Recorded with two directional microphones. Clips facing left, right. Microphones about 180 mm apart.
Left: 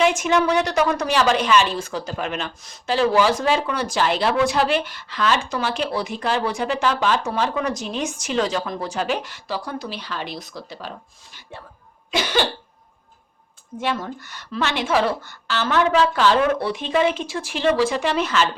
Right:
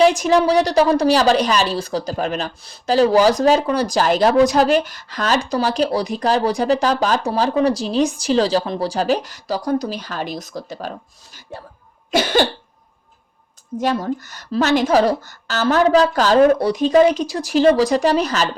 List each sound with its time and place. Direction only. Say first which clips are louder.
0.0 s a woman's voice: right 5 dB; 35° right (ahead or behind)
12.1 s cough: right 5 dB; 45° right (ahead or behind)
13.7 s a woman's voice: right 6 dB; 40° right (ahead or behind)